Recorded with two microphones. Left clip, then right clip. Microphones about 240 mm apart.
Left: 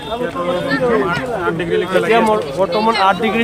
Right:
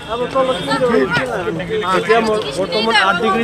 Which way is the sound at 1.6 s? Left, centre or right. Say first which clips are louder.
Left 3 dB; left.